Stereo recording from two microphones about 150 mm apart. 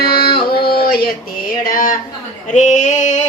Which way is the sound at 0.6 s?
90° left.